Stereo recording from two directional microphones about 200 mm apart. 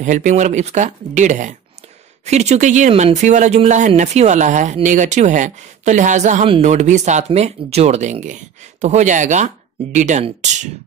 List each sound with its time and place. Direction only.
0.0 s speech: 40° right (ahead or behind)